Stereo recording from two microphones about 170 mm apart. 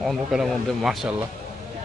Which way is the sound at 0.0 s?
Centre (ahead or behind).